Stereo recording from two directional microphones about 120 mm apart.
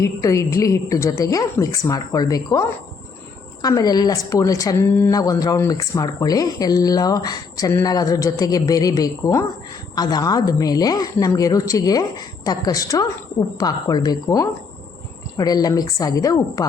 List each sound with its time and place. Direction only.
0.0 s a woman's voice: 25° left (ahead or behind)